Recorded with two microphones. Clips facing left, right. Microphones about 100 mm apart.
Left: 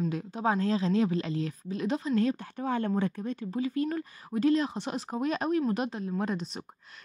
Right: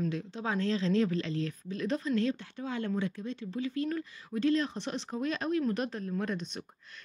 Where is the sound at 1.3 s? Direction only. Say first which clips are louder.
Left 2 dB; 35° right (ahead or behind).